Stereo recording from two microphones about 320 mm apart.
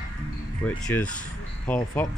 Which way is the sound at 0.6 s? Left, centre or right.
Centre.